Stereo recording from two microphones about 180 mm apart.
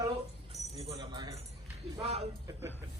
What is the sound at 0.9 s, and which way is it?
Keys jangling, 25° right (ahead or behind).